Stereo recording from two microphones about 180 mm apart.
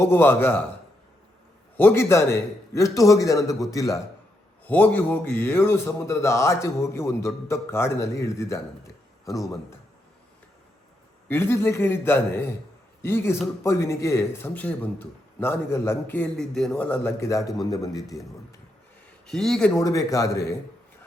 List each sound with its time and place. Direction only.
0.0 s a man's voice: 10° left (ahead or behind)
1.7 s a man's voice: 10° left (ahead or behind)
11.3 s a man's voice: 15° left (ahead or behind)
18.0 s speech: centre (ahead or behind)
19.3 s speech: centre (ahead or behind)
19.7 s a man's voice: 15° left (ahead or behind)